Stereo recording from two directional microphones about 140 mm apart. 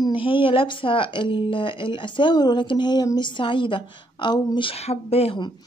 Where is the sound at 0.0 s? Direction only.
35° left (ahead or behind).